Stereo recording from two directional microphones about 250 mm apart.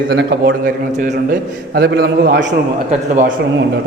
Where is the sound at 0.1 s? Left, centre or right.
Right.